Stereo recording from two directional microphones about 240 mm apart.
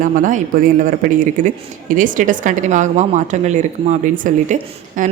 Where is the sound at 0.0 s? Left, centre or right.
Right.